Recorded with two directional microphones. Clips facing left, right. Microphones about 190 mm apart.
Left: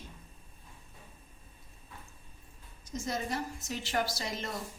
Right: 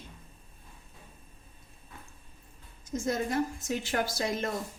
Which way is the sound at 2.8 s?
50° right (ahead or behind).